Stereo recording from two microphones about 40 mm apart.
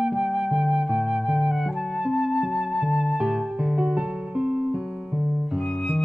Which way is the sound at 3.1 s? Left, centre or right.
Centre.